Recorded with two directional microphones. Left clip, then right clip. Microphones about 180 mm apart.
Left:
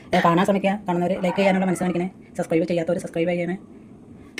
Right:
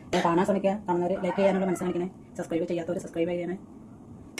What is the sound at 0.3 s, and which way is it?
Speech, 50° left (ahead or behind).